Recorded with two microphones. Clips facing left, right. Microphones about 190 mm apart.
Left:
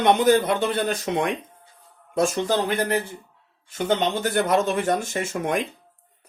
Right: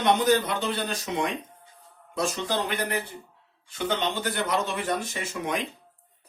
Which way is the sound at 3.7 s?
45° left (ahead or behind).